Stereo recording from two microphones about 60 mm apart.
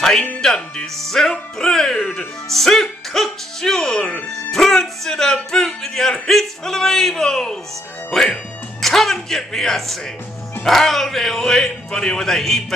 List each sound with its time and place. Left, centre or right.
0.4 s speech: centre
2.0 s speech: left
2.5 s a man's voice: centre